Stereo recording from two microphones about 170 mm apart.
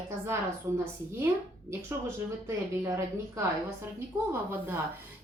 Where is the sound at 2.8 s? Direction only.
15° right (ahead or behind).